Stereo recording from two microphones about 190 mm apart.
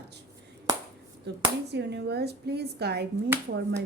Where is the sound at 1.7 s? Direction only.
60° right (ahead or behind).